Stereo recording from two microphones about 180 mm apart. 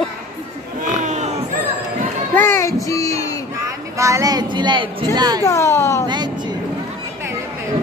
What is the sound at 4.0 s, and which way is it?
Speech, 15° right (ahead or behind).